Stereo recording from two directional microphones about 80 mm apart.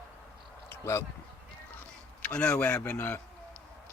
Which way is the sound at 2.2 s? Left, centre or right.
Centre.